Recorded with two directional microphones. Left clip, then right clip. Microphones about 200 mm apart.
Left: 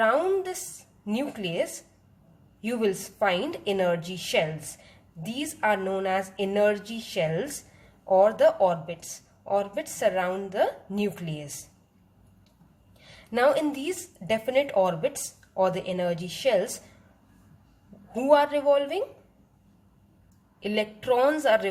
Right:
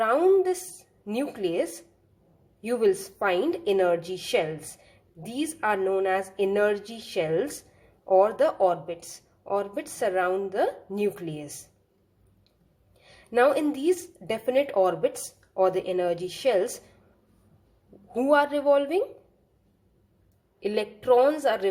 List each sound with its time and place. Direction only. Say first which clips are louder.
0.0 s a sound: right 2 dB; 25° right (ahead or behind)
1.0 s a woman's voice: right 2 dB; 25° right (ahead or behind)
13.1 s a woman's voice: right 1 dB; 25° right (ahead or behind)
18.1 s a woman's voice: left 1 dB; 25° right (ahead or behind)
20.6 s a woman's voice: even; 25° right (ahead or behind)